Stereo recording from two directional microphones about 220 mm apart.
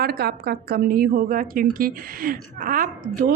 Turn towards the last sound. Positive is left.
turn(degrees=-40)  # may be behind; listen again after turning